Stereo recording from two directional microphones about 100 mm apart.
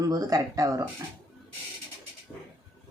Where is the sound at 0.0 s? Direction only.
35° right (ahead or behind).